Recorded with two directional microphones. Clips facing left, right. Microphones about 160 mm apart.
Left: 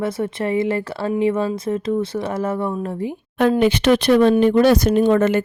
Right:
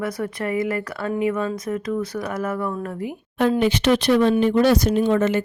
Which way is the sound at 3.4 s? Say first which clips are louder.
Left 3 dB; 65° left (ahead or behind).